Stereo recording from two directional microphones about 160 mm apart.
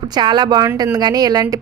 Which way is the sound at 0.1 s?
25° right (ahead or behind).